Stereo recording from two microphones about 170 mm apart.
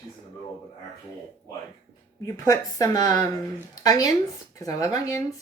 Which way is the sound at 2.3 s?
20° left (ahead or behind).